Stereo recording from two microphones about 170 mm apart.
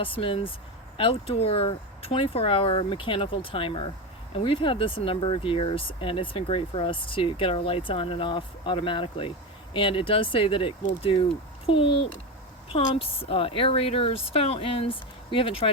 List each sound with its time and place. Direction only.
0.0 s speech: 30° left (ahead or behind)